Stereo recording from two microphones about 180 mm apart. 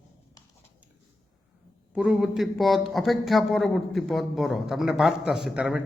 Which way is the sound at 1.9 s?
5° right (ahead or behind).